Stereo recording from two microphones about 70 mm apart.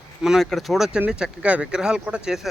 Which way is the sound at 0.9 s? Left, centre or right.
Centre.